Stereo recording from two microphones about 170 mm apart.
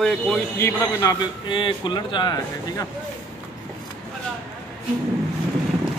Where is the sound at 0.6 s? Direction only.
15° left (ahead or behind).